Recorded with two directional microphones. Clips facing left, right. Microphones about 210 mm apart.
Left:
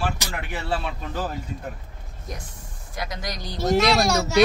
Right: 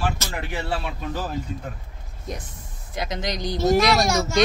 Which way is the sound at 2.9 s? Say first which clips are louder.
Right 4 dB; 20° right (ahead or behind).